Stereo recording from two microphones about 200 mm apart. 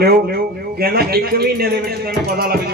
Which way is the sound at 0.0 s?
50° right (ahead or behind).